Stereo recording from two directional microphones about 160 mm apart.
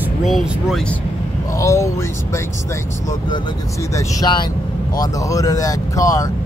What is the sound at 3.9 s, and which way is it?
Speech, 25° left (ahead or behind).